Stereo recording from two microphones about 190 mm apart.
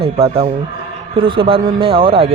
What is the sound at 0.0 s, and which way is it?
Speech, 30° right (ahead or behind).